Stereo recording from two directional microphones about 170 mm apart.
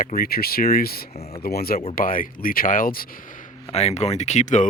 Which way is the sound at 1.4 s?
65° left (ahead or behind).